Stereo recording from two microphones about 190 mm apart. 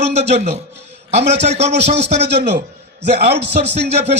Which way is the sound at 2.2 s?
60° right (ahead or behind).